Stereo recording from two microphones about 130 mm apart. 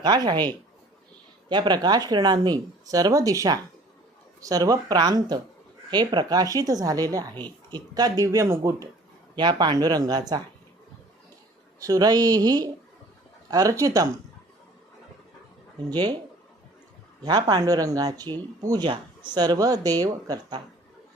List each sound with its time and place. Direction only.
0.0 s speech: 35° right (ahead or behind)
1.5 s speech: 35° right (ahead or behind)
9.3 s speech: 35° right (ahead or behind)
11.8 s speech: 30° right (ahead or behind)
17.2 s speech: 35° right (ahead or behind)